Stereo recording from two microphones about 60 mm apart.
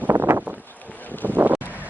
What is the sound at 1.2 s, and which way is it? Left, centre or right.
Boat, right.